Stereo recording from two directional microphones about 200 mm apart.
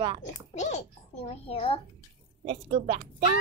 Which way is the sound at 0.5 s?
35° left (ahead or behind).